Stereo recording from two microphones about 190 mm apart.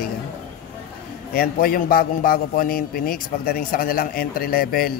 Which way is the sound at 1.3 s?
50° left (ahead or behind).